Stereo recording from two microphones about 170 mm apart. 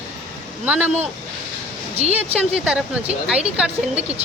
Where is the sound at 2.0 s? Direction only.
40° right (ahead or behind).